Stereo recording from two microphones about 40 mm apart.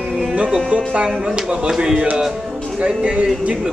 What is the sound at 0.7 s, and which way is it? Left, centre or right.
Speech, right.